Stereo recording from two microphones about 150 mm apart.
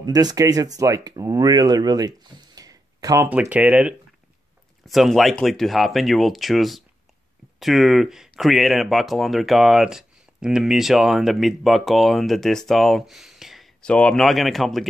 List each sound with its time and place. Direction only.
0.0 s speech: 25° right (ahead or behind)
3.3 s speech: 10° right (ahead or behind)